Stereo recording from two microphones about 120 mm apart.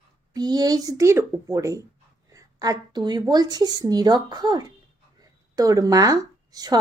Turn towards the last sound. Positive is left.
turn(degrees=-30)  # may be behind; listen again after turning